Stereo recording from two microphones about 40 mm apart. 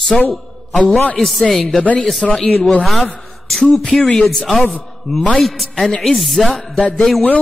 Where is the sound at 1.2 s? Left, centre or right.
Centre.